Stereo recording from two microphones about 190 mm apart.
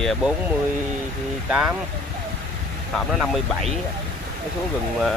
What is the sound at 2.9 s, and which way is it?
Speech, centre (ahead or behind).